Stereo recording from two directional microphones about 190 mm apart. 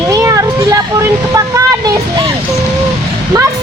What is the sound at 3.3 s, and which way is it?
Speech, 20° right (ahead or behind).